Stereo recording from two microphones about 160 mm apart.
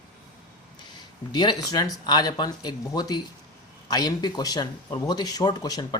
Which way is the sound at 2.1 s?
25° left (ahead or behind).